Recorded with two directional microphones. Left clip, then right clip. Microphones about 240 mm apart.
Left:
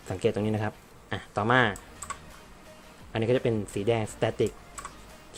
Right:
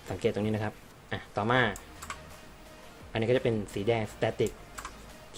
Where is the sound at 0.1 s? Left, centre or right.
Centre.